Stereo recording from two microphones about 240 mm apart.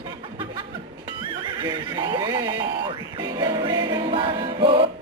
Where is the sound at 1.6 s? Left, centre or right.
Centre.